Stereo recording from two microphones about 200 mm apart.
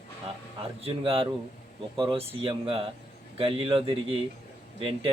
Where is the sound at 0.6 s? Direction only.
30° right (ahead or behind).